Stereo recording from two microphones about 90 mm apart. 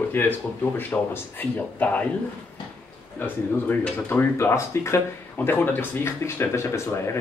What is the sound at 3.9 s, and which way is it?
Speech, 25° left (ahead or behind).